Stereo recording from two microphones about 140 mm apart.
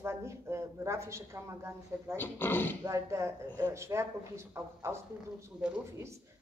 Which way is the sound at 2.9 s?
20° right (ahead or behind).